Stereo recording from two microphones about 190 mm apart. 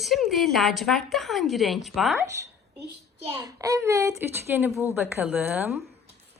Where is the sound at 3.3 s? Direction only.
20° right (ahead or behind).